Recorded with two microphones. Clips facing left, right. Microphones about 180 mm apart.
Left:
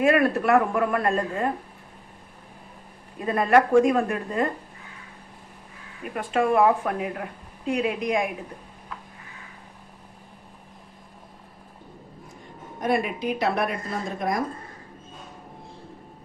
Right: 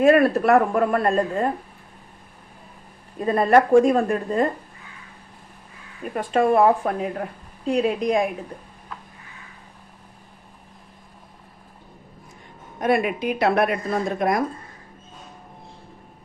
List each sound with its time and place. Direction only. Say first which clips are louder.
0.0 s a woman's voice: right 4 dB; 35° right (ahead or behind)
3.2 s a woman's voice: right 3 dB; 35° right (ahead or behind)
6.1 s a woman's voice: right 3 dB; 35° right (ahead or behind)
12.8 s a woman's voice: right 4 dB; 65° right (ahead or behind)